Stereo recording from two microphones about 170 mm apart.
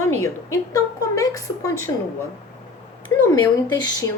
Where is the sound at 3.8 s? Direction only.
20° left (ahead or behind).